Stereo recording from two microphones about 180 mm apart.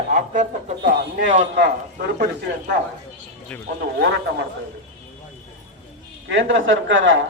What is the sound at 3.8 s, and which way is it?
Speech, 65° right (ahead or behind).